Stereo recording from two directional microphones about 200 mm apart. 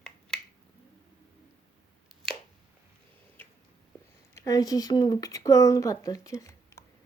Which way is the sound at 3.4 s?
10° left (ahead or behind).